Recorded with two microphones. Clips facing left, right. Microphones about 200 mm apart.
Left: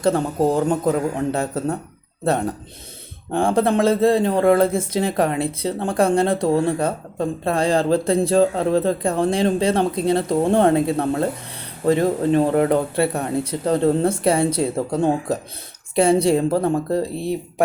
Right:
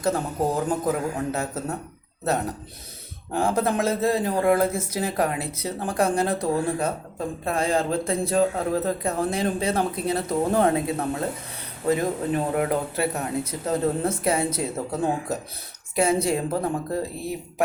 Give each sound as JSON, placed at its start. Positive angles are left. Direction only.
{"t": 0.0, "sound": "speech", "side_deg": 30}